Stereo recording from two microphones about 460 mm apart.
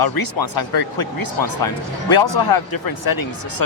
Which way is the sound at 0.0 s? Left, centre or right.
Left.